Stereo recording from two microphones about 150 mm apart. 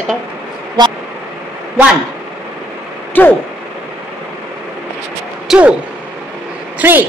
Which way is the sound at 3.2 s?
10° left (ahead or behind).